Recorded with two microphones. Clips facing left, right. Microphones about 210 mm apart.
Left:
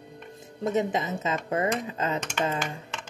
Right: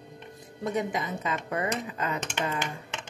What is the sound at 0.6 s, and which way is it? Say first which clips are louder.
Speech: left 3 dB; 25° left (ahead or behind).